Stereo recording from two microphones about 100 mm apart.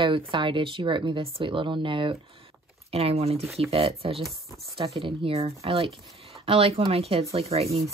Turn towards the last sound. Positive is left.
turn(degrees=-90)